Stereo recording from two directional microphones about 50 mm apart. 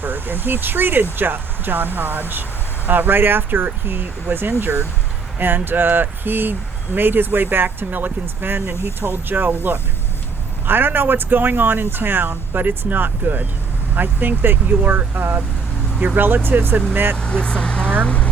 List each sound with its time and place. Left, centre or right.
0.0 s speech: right
5.4 s speech: right
10.7 s speech: right
17.2 s speech: centre
18.0 s speech: left